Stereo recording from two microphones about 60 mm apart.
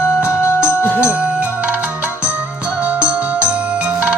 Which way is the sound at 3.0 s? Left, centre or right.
Right.